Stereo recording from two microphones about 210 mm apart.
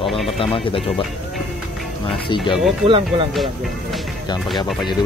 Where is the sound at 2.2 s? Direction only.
25° left (ahead or behind).